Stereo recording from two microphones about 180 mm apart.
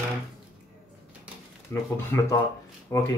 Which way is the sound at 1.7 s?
15° left (ahead or behind).